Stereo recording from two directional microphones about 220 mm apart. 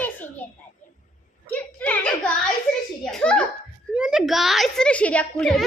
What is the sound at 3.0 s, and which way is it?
Hands, 5° left (ahead or behind).